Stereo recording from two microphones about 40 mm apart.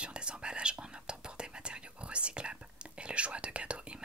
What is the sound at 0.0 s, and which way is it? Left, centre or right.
Whispering, right.